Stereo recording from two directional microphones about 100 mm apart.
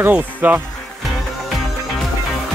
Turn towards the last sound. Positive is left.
turn(degrees=-15)  # may be behind; listen again after turning